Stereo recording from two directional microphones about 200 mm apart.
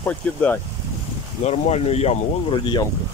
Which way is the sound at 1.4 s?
30° left (ahead or behind).